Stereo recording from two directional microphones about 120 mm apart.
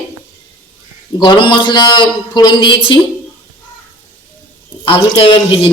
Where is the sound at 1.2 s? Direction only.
40° left (ahead or behind).